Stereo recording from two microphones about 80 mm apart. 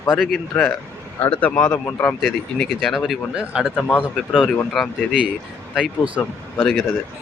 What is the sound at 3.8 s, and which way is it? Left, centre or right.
Speech, left.